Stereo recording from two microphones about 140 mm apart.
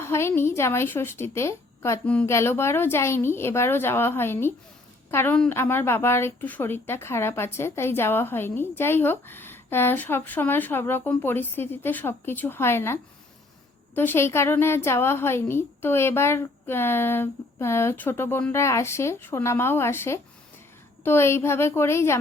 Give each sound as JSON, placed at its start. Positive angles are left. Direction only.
{"t": 0.0, "sound": "a woman's voice", "side_deg": 20}